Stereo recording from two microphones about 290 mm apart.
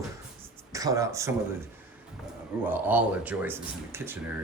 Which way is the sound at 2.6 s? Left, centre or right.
Centre.